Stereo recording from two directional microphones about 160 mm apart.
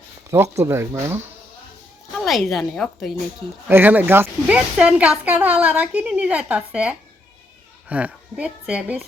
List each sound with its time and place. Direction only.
0.3 s speech: 20° right (ahead or behind)
2.1 s a woman's voice: centre (ahead or behind)
3.7 s speech: 10° right (ahead or behind)